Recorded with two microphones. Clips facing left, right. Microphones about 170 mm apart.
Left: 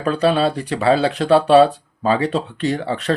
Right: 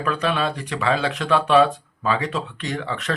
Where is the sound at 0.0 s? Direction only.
35° left (ahead or behind).